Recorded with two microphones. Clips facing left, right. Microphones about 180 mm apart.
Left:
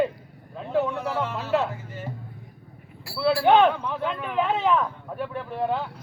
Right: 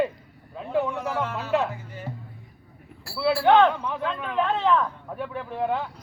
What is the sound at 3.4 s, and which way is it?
Speech, 10° left (ahead or behind).